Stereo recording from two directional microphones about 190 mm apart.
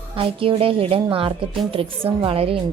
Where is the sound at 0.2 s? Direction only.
30° right (ahead or behind).